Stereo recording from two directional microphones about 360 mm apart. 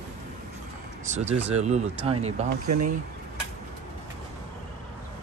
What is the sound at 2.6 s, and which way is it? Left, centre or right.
Speech, right.